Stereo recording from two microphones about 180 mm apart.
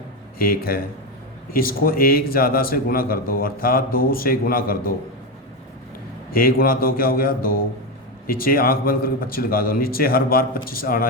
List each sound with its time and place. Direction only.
0.3 s speech: 55° left (ahead or behind)
6.3 s speech: 55° left (ahead or behind)